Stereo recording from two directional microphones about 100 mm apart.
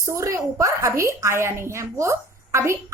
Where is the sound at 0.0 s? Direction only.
30° right (ahead or behind).